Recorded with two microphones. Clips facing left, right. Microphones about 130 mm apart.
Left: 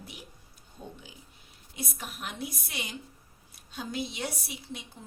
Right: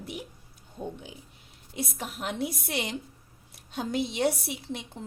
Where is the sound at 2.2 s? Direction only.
80° right.